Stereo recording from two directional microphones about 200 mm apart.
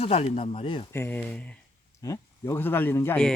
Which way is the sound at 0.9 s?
10° left (ahead or behind).